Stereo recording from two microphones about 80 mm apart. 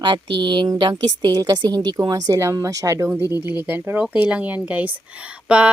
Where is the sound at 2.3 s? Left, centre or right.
Right.